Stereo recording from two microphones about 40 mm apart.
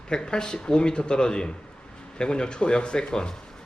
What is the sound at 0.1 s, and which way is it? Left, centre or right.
A man's voice, left.